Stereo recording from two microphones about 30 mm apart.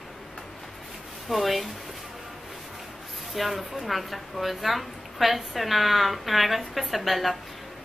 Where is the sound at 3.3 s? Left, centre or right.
Centre.